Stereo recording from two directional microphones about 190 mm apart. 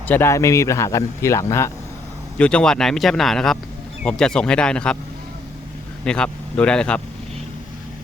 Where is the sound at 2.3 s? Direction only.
5° left (ahead or behind).